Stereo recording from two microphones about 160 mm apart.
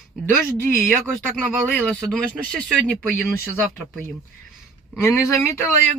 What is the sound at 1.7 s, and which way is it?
Speech, 10° left (ahead or behind).